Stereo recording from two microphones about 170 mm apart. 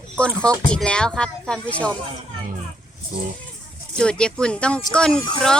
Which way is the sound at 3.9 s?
5° left (ahead or behind).